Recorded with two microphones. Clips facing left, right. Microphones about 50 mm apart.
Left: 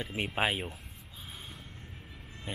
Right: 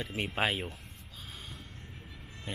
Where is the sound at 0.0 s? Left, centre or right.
Centre.